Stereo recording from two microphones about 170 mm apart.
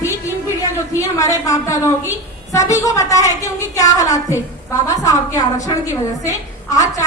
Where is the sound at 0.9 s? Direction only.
20° left (ahead or behind).